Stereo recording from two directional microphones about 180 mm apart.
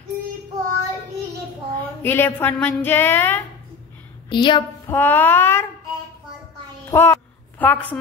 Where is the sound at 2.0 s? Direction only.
10° left (ahead or behind).